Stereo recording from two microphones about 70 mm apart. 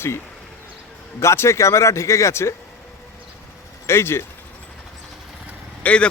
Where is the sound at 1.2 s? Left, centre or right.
Left.